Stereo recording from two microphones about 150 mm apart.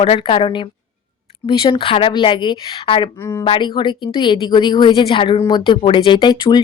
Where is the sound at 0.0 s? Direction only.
40° left (ahead or behind).